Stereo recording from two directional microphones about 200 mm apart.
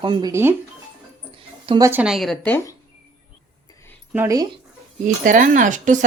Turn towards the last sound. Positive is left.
turn(degrees=-40)  # may be behind; listen again after turning